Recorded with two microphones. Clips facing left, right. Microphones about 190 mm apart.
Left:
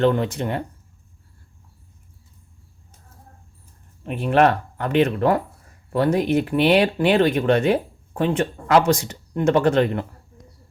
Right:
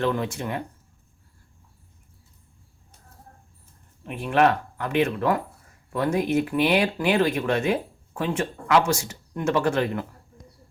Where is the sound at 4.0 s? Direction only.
35° left (ahead or behind).